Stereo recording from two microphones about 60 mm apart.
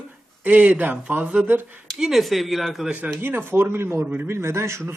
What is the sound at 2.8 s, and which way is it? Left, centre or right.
Speech, right.